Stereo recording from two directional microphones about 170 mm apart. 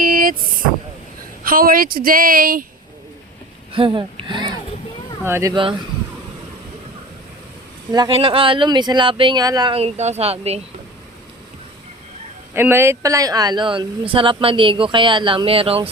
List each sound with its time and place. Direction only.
0.0 s vehicle: 55° right (ahead or behind)
1.5 s speech: 55° right (ahead or behind)
3.7 s speech: 30° right (ahead or behind)
5.2 s speech: 15° right (ahead or behind)
7.9 s speech: 30° right (ahead or behind)
12.5 s speech: 15° right (ahead or behind); by 15.9 s 35° right (ahead or behind)